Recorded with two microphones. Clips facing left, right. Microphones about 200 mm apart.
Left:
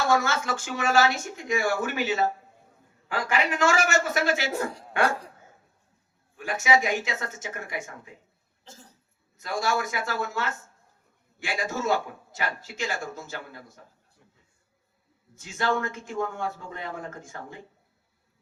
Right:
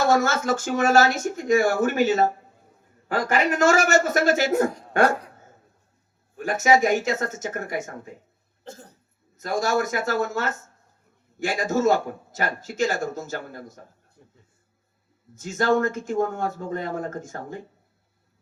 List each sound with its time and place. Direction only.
0.1 s speech: 45° right (ahead or behind)
6.3 s speech: 45° right (ahead or behind)
8.6 s cough: 55° right (ahead or behind)
9.4 s speech: 45° right (ahead or behind)
14.2 s a sound: 35° right (ahead or behind)
15.4 s speech: 45° right (ahead or behind)